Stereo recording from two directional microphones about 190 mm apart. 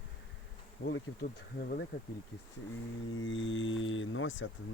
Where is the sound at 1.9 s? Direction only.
90° left.